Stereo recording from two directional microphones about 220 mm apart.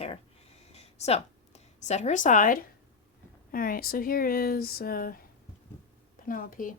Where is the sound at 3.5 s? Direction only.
40° left (ahead or behind).